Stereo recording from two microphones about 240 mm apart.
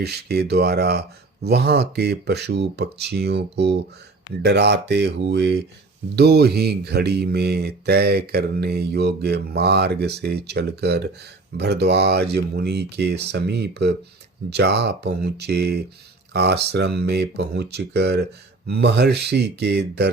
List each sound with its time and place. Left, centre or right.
0.0 s speech: right